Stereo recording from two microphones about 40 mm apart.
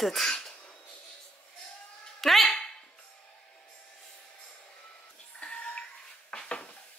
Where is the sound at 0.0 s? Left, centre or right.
Centre.